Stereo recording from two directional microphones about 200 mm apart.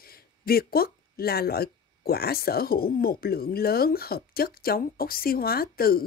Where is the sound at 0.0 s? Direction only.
50° left (ahead or behind).